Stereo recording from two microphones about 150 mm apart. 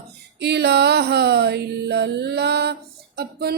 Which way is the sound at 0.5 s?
90° right.